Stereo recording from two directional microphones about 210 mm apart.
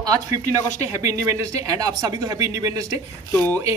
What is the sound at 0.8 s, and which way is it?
Speech, 15° right (ahead or behind).